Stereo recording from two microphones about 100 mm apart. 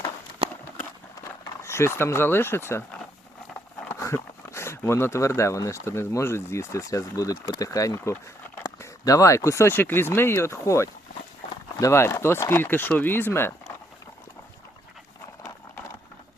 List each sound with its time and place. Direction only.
0.4 s run: 65° right (ahead or behind)
1.6 s speech: 25° left (ahead or behind)
3.8 s speech: 25° left (ahead or behind)